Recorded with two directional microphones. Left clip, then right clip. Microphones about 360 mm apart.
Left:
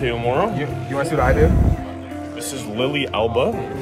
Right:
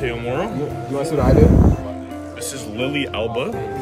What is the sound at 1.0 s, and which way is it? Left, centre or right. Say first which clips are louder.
Speech: left 1 dB; centre.